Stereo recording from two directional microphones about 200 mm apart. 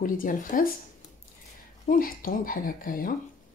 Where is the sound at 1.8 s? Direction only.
45° left (ahead or behind).